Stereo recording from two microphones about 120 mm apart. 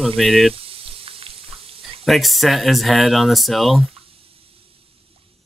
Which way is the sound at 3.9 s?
55° right (ahead or behind).